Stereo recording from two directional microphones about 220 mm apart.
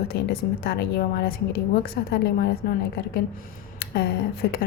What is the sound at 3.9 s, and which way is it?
Speech, 45° left (ahead or behind).